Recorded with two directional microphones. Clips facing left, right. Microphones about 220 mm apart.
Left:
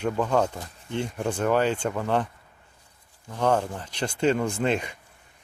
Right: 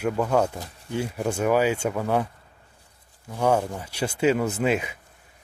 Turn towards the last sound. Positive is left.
turn(degrees=-5)  # may be behind; listen again after turning